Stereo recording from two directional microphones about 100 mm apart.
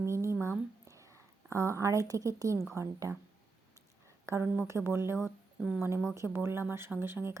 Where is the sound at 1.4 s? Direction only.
30° right (ahead or behind).